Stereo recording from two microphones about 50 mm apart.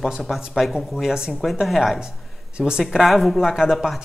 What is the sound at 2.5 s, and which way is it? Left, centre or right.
Speech, centre.